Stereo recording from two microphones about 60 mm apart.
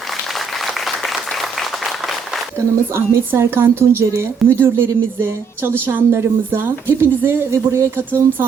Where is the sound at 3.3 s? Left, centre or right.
Right.